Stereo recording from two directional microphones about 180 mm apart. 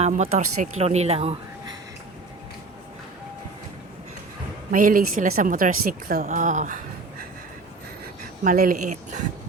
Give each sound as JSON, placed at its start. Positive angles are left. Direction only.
{"t": 0.0, "sound": "speech", "side_deg": -35}
{"t": 4.7, "sound": "a woman's voice", "side_deg": -50}
{"t": 8.4, "sound": "a woman's voice", "side_deg": -50}